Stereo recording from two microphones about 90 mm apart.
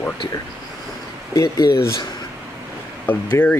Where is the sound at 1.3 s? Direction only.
35° left (ahead or behind).